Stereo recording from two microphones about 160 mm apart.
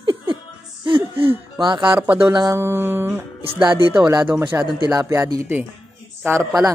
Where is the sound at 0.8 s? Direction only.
30° right (ahead or behind).